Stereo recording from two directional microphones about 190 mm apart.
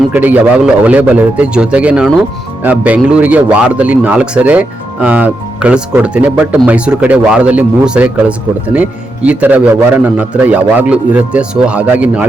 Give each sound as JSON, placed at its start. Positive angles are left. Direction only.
{"t": 0.1, "sound": "speech", "side_deg": -10}